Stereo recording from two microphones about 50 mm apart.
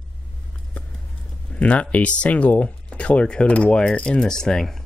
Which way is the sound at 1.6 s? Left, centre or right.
Left.